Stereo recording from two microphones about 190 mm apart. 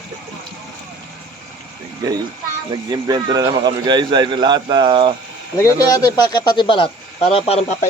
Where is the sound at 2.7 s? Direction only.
25° right (ahead or behind).